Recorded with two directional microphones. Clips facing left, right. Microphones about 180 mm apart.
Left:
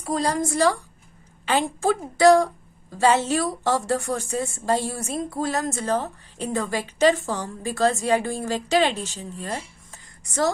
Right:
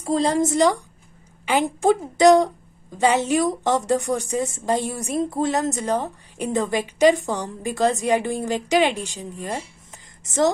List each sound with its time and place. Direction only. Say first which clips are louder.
0.0 s a woman's voice: right 4 dB; 25° right (ahead or behind)